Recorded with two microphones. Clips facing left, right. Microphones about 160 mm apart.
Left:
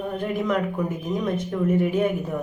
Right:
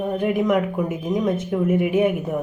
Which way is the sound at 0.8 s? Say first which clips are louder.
Right 2 dB; 10° right (ahead or behind).